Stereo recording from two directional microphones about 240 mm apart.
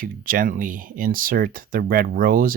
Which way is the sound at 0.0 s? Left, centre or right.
Right.